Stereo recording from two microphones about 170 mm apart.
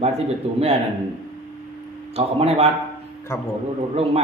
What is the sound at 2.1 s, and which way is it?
Speech, 35° right (ahead or behind).